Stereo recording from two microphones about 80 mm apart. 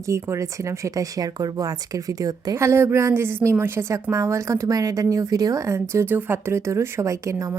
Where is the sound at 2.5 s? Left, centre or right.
Right.